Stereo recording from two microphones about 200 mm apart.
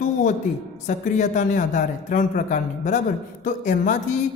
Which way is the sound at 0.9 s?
35° left (ahead or behind).